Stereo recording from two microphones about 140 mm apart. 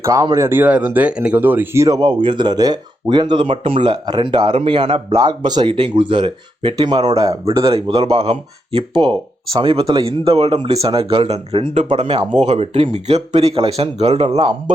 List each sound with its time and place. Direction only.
0.0 s speech: 20° right (ahead or behind)
7.7 s speech: 45° right (ahead or behind)
12.4 s speech: 50° right (ahead or behind)